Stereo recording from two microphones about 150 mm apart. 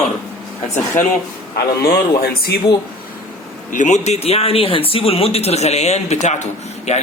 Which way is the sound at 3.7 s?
55° left (ahead or behind).